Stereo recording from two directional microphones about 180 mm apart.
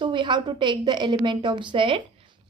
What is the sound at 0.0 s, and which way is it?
Speech, 25° right (ahead or behind).